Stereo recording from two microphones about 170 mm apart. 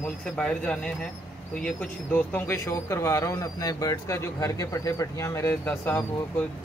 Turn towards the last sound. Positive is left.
turn(degrees=10)  # may be behind; listen again after turning